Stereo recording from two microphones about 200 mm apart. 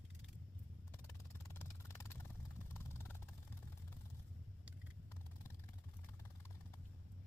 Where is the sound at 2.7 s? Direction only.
10° left (ahead or behind).